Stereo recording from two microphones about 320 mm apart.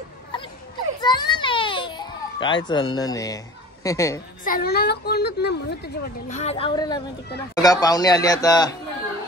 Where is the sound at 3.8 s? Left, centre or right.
Centre.